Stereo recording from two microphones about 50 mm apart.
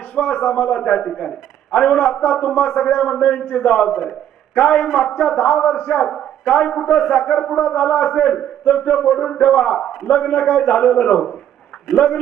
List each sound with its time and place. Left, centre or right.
0.1 s a man's voice: centre
7.2 s a man's voice: centre
11.9 s a man's voice: centre